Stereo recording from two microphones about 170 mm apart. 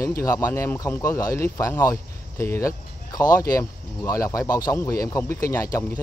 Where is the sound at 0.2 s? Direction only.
15° left (ahead or behind).